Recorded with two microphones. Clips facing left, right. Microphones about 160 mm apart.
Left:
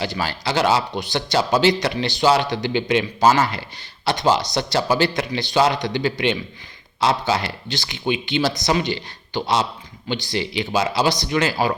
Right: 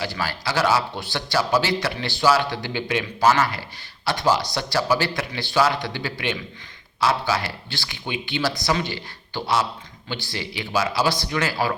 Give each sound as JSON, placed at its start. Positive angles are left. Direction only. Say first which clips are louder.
{"t": 0.0, "sound": "speech", "louder": "left 3 dB", "side_deg": 25}